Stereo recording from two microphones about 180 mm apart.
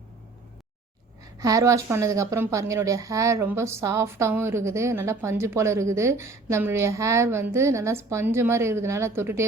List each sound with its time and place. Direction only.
1.4 s a woman's voice: 20° right (ahead or behind)